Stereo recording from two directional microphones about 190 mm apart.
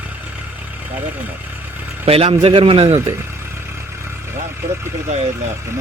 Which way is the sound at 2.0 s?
30° right (ahead or behind).